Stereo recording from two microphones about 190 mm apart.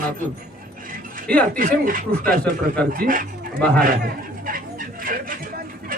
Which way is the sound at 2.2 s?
5° left (ahead or behind).